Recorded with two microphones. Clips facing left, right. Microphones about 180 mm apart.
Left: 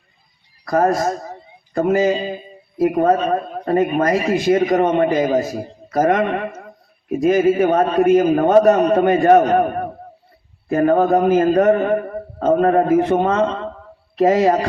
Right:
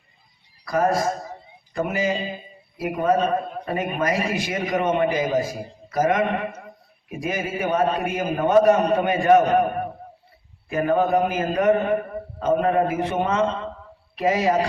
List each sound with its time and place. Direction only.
0.6 s a man's voice: 50° left (ahead or behind)
7.3 s a man's voice: 45° left (ahead or behind)